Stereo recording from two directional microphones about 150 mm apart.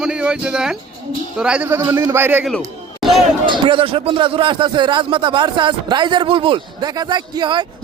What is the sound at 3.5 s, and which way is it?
A man's voice, 35° right (ahead or behind).